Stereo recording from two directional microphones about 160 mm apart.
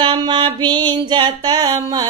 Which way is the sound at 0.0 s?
30° right (ahead or behind).